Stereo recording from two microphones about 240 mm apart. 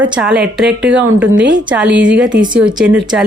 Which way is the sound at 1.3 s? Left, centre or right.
Right.